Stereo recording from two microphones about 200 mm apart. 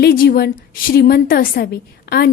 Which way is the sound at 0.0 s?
50° left (ahead or behind).